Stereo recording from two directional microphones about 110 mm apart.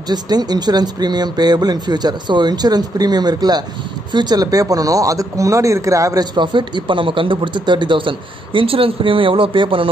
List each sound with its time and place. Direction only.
0.1 s speech: 40° right (ahead or behind)
6.3 s speech: 45° right (ahead or behind)